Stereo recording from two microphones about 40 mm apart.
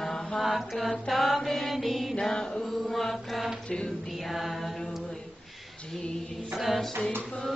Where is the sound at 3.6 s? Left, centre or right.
Centre.